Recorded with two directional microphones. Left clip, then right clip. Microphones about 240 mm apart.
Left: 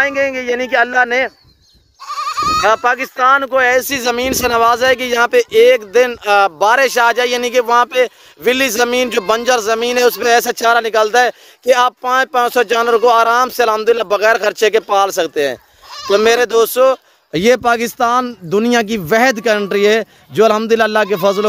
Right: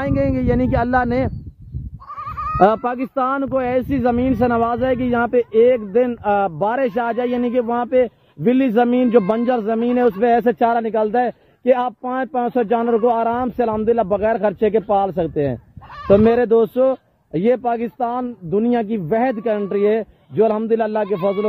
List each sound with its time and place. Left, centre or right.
0.0 s speech: centre
2.1 s bleat: left
3.2 s speech: centre